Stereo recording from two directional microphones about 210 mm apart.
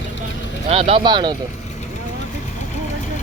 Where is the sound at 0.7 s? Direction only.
30° right (ahead or behind).